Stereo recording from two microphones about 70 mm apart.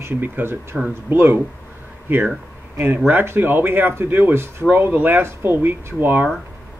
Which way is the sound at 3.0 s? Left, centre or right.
Right.